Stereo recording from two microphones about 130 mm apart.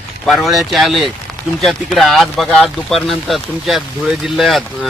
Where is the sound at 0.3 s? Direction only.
Centre (ahead or behind).